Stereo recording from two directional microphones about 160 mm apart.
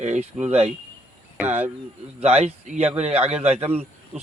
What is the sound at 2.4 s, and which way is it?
Speech, 45° right (ahead or behind).